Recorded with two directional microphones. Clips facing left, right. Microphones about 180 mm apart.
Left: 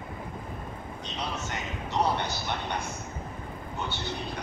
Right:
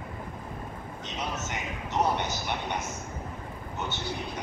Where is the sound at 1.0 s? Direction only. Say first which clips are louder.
Right 1 dB; 15° right (ahead or behind).